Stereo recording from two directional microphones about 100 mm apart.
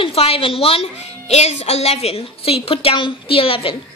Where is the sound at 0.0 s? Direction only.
75° left (ahead or behind).